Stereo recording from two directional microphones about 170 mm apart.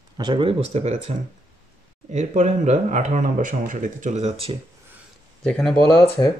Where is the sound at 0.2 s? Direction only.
30° right (ahead or behind).